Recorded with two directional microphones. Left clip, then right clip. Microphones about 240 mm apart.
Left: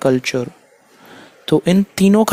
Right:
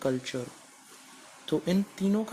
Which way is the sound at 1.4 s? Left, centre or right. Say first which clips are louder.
Left 14 dB; left.